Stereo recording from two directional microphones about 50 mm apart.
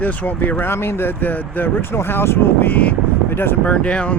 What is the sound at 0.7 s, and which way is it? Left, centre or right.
Speech, left.